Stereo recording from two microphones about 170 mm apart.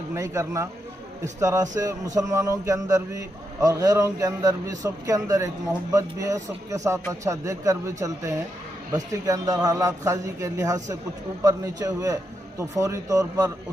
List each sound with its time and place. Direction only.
0.1 s a man's voice: 20° right (ahead or behind)